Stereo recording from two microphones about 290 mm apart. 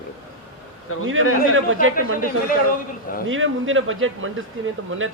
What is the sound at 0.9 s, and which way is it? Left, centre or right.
Speech, left.